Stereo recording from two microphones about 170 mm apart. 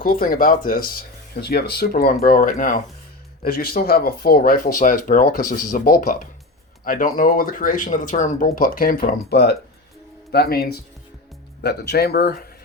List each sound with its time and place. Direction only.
0.0 s speech: 60° left (ahead or behind)